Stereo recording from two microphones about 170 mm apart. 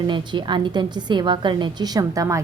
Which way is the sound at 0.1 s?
25° right (ahead or behind).